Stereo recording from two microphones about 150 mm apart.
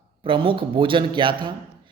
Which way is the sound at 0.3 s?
35° right (ahead or behind).